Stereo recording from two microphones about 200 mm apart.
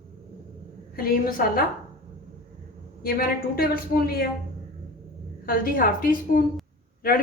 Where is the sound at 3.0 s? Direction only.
50° left (ahead or behind).